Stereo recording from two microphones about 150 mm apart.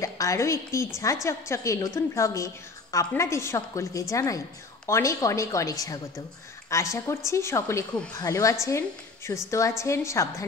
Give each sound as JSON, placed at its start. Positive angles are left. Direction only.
{"t": 0.0, "sound": "a woman's voice", "side_deg": 20}